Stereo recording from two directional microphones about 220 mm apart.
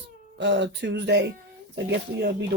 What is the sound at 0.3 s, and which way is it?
Speech, 55° right (ahead or behind).